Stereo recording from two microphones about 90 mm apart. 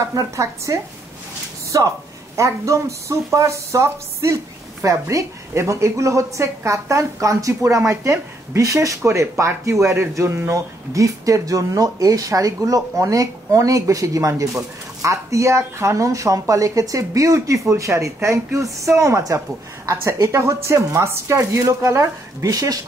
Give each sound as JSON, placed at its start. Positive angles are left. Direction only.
{"t": 0.1, "sound": "a man's voice", "side_deg": -35}
{"t": 2.3, "sound": "speech", "side_deg": -35}